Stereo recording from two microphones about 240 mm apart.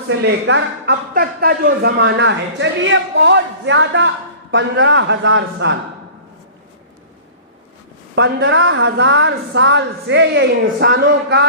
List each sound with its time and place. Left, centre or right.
0.1 s speech: right
8.1 s speech: right